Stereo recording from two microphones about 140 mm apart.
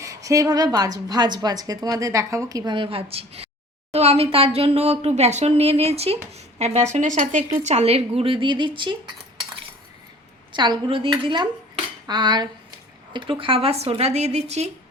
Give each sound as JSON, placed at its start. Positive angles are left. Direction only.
{"t": 0.0, "sound": "a woman's voice", "side_deg": -20}
{"t": 10.5, "sound": "a woman's voice", "side_deg": -35}